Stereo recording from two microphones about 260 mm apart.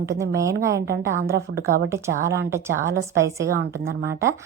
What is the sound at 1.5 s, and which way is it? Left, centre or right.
Speech, right.